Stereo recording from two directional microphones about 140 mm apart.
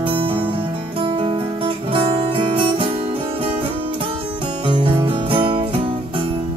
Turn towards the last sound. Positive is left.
turn(degrees=-40)  # may be behind; listen again after turning